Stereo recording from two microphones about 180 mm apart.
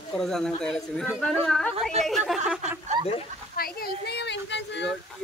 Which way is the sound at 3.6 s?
60° left (ahead or behind).